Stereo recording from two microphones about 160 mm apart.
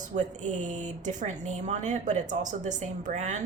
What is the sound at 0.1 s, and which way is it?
Speech, 50° right (ahead or behind).